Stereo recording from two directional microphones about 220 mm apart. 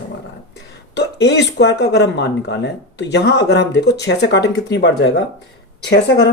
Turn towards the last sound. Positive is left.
turn(degrees=50)  # may be behind; listen again after turning